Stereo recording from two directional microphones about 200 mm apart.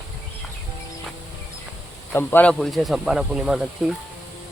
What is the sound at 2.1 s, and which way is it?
Speech, 10° left (ahead or behind).